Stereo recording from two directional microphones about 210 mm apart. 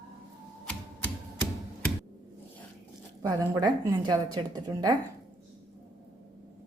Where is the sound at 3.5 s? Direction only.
20° right (ahead or behind).